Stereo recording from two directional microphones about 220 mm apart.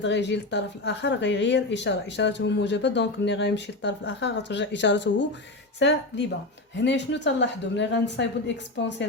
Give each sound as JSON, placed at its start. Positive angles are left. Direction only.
{"t": 0.0, "sound": "speech", "side_deg": 55}